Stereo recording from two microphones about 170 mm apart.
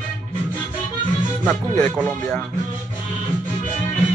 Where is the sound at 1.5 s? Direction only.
5° left (ahead or behind).